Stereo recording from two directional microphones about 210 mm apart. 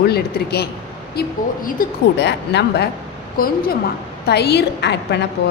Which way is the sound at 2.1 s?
55° left (ahead or behind).